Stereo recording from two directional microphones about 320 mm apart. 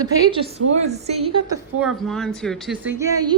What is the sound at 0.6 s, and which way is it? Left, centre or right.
Speech, right.